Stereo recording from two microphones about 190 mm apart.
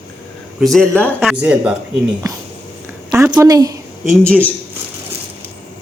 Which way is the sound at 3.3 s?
20° right (ahead or behind).